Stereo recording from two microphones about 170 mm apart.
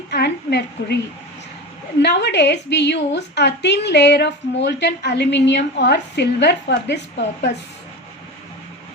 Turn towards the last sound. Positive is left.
turn(degrees=90)